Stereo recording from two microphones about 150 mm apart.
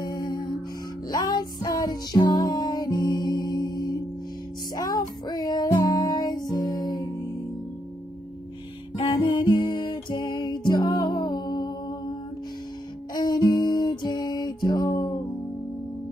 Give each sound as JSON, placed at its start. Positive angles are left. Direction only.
{"t": 0.0, "sound": "music", "side_deg": 25}
{"t": 9.1, "sound": "music", "side_deg": 25}
{"t": 13.1, "sound": "music", "side_deg": 25}